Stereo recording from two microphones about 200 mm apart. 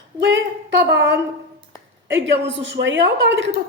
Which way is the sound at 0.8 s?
60° right (ahead or behind).